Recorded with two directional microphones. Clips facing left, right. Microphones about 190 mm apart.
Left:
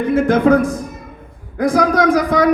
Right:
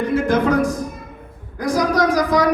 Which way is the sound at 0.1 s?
55° left (ahead or behind).